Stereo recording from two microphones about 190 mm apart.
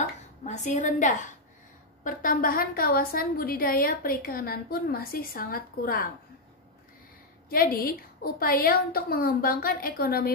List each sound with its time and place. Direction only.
0.4 s a woman's voice: 40° left (ahead or behind)
7.4 s a woman's voice: 50° left (ahead or behind)